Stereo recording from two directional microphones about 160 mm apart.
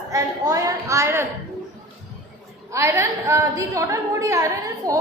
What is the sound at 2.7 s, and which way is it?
A woman's voice, 15° right (ahead or behind).